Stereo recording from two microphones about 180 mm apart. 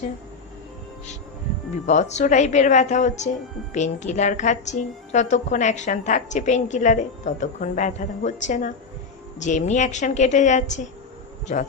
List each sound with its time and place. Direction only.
1.9 s a woman's voice: 40° left (ahead or behind)